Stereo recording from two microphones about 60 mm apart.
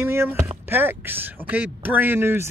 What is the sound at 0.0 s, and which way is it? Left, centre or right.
Speech, right.